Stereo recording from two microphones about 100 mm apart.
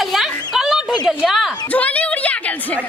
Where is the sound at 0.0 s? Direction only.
Centre (ahead or behind).